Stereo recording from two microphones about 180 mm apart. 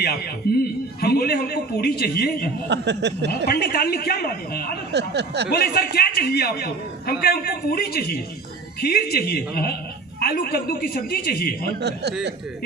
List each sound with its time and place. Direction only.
0.4 s a man's voice: 60° left (ahead or behind)
2.6 s speech: 70° right (ahead or behind)
3.5 s a man's voice: 55° left (ahead or behind)
4.9 s speech: 70° right (ahead or behind)
5.5 s a man's voice: 60° left (ahead or behind)
11.8 s speech: 70° right (ahead or behind)